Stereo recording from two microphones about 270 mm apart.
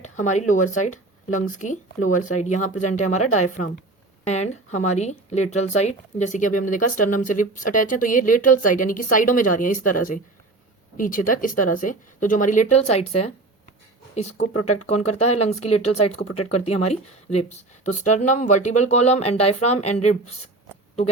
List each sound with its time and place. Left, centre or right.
0.0 s speech: left
14.8 s speech: left
15.8 s speech: left
16.6 s speech: left